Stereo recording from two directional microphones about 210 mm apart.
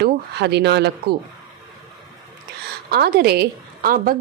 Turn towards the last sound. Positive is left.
turn(degrees=-45)  # may be behind; listen again after turning